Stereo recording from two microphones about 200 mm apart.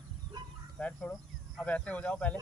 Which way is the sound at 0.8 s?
5° left (ahead or behind).